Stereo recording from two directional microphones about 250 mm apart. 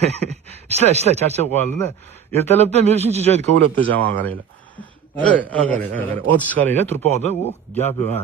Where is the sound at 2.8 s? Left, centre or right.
Right.